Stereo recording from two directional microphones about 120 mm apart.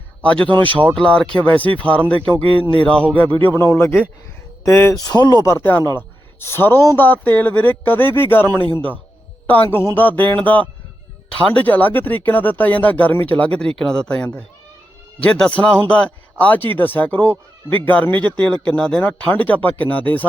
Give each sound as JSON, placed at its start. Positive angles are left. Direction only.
{"t": 0.2, "sound": "speech", "side_deg": 10}
{"t": 5.0, "sound": "speech", "side_deg": 35}